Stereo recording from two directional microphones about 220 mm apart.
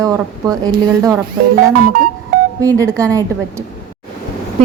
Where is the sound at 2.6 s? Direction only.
15° right (ahead or behind).